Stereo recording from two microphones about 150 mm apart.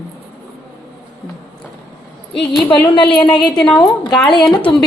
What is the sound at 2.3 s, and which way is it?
Speech, centre (ahead or behind).